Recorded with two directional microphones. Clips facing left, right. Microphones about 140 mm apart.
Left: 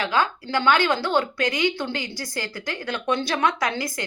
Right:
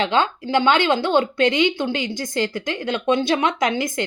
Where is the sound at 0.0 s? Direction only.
25° right (ahead or behind).